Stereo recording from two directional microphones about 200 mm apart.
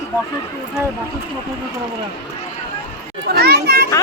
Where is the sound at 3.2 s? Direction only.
55° right (ahead or behind).